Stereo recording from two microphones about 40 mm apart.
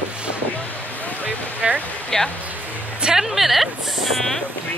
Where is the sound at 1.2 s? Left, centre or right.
Right.